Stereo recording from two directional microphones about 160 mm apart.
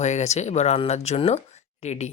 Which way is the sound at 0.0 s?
45° left (ahead or behind).